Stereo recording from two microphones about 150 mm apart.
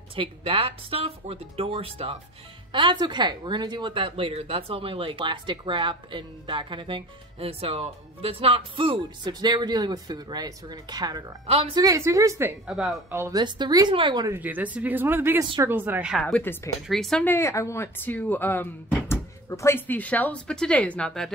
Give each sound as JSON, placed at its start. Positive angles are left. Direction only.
{"t": 0.1, "sound": "speech", "side_deg": -35}
{"t": 11.4, "sound": "speech", "side_deg": -40}
{"t": 11.7, "sound": "speech", "side_deg": -20}
{"t": 12.6, "sound": "speech", "side_deg": -5}
{"t": 13.1, "sound": "speech", "side_deg": -15}
{"t": 13.4, "sound": "speech", "side_deg": -30}
{"t": 14.3, "sound": "speech", "side_deg": -10}
{"t": 16.2, "sound": "speech", "side_deg": 5}
{"t": 17.3, "sound": "speech", "side_deg": 20}